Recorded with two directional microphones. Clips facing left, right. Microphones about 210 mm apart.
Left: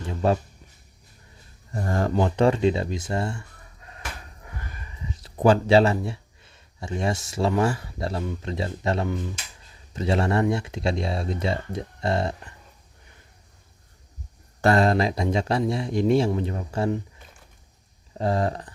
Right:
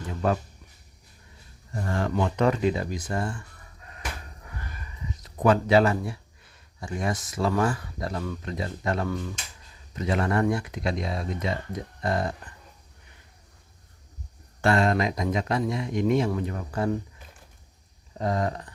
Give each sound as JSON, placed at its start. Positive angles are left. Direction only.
{"t": 0.1, "sound": "speech", "side_deg": 30}
{"t": 1.7, "sound": "speech", "side_deg": 40}
{"t": 5.1, "sound": "speech", "side_deg": 30}
{"t": 14.6, "sound": "speech", "side_deg": 35}
{"t": 18.2, "sound": "speech", "side_deg": 30}